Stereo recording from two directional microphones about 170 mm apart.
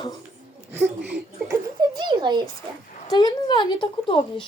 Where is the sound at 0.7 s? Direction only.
15° right (ahead or behind).